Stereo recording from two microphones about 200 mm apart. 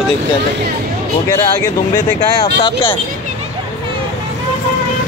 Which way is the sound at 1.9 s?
20° left (ahead or behind).